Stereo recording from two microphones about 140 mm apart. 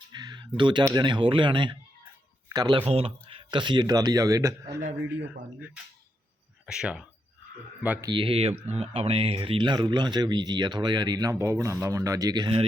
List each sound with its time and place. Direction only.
0.1 s a sound: 30° right (ahead or behind)
0.9 s speech: 35° right (ahead or behind)
5.5 s speech: 10° right (ahead or behind)
8.0 s speech: 40° right (ahead or behind)